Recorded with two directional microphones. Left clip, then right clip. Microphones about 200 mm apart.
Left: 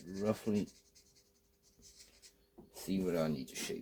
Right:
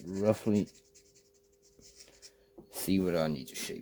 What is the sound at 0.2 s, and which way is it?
Speech, 40° right (ahead or behind).